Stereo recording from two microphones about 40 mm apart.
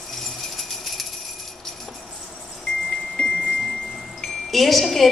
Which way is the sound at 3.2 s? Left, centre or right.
Left.